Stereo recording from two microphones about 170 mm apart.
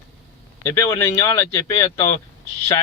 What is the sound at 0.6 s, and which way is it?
Speech, 15° left (ahead or behind).